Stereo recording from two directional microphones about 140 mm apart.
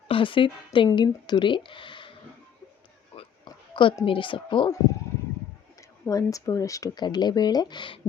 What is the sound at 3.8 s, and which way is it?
Speech, 35° left (ahead or behind).